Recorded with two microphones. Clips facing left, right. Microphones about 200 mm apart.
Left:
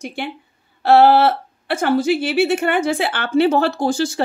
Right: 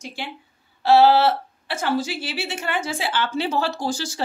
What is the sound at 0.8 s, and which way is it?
Speech, 60° left (ahead or behind).